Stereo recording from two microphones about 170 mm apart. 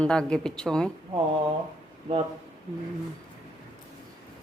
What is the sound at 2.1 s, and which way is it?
Speech, 35° right (ahead or behind).